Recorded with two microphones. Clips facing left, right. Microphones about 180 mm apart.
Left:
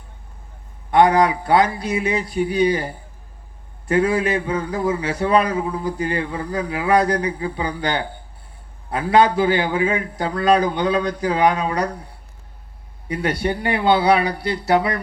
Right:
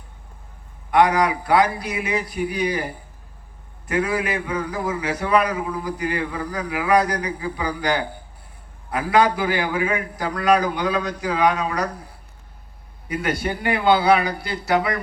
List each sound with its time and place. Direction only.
0.9 s a man's voice: 30° left (ahead or behind)
13.1 s a man's voice: 30° left (ahead or behind)